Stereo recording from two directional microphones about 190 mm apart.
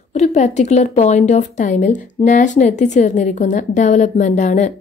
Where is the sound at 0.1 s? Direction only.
35° left (ahead or behind).